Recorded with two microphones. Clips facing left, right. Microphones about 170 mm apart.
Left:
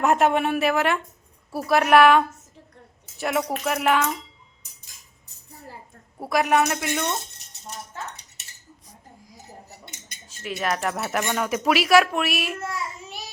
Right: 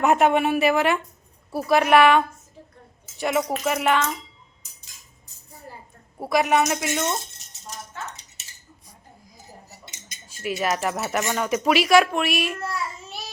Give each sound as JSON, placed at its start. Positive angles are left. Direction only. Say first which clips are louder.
{"t": 0.0, "sound": "speech", "louder": "right 1 dB", "side_deg": 0}
{"t": 6.1, "sound": "speech", "louder": "right 1 dB", "side_deg": 0}
{"t": 7.7, "sound": "cutlery", "louder": "even", "side_deg": 60}
{"t": 9.6, "sound": "cutlery", "louder": "left 2 dB", "side_deg": 60}
{"t": 10.2, "sound": "speech", "louder": "right 2 dB", "side_deg": -10}